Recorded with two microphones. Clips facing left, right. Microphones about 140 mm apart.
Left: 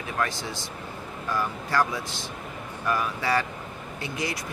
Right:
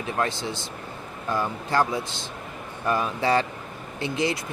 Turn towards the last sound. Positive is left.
turn(degrees=-25)  # may be behind; listen again after turning